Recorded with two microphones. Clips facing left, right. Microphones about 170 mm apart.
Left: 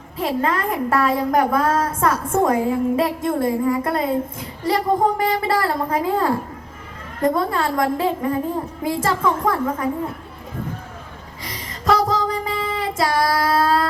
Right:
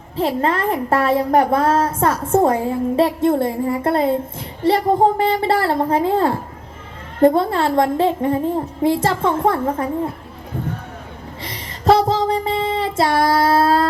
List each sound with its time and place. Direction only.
0.2 s speech: 30° right (ahead or behind)
11.4 s child singing: 30° right (ahead or behind)